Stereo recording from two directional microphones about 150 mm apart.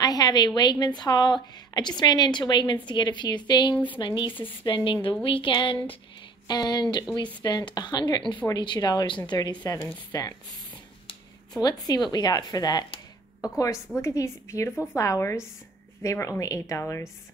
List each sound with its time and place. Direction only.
0.0 s a woman's voice: 25° left (ahead or behind)
11.6 s speech: 25° left (ahead or behind)